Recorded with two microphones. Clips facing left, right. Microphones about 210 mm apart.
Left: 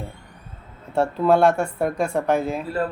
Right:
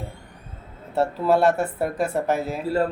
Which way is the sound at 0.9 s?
Centre (ahead or behind).